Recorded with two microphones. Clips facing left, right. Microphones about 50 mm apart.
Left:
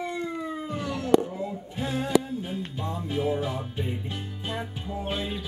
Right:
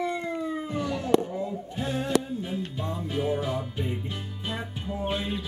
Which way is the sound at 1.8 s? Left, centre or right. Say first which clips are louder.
Left 2 dB; centre.